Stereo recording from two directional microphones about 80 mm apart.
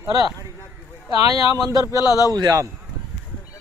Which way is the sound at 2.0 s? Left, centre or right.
Left.